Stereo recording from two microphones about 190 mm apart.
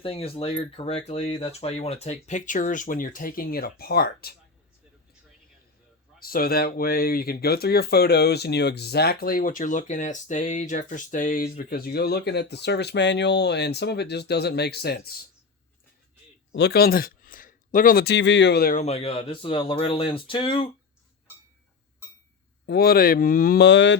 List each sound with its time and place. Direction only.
0.0 s speech: 30° left (ahead or behind); by 4.4 s 55° left (ahead or behind)
6.1 s speech: 50° left (ahead or behind)
16.5 s speech: 65° left (ahead or behind)
18.8 s speech: 35° left (ahead or behind)
22.6 s speech: 55° left (ahead or behind)